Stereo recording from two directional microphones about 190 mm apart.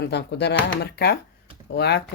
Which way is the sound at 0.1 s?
60° left (ahead or behind).